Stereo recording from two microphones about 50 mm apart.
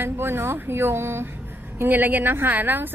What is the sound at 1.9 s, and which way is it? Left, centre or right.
Speech, right.